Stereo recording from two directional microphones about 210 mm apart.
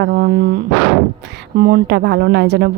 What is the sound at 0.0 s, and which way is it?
A woman's voice, 50° right (ahead or behind).